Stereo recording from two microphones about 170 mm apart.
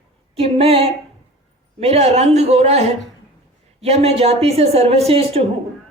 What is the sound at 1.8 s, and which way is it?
A man's voice, 35° right (ahead or behind).